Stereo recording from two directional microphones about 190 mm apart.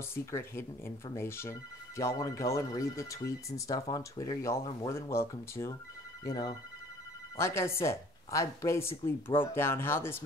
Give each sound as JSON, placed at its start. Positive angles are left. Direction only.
{"t": 0.1, "sound": "speech", "side_deg": 10}